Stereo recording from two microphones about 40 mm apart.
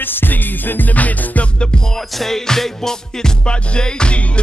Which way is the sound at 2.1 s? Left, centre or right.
Centre.